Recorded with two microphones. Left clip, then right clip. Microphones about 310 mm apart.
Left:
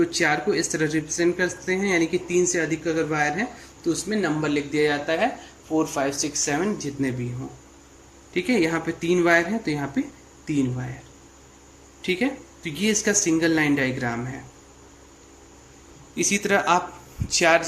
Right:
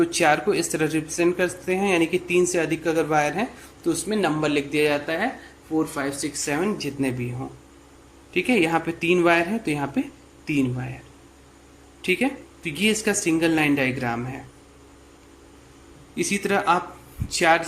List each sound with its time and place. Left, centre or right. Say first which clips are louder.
0.0 s speech: right 2 dB; centre
8.3 s speech: right 2 dB; centre
12.0 s speech: right 2 dB; centre
16.1 s speech: left 2 dB; centre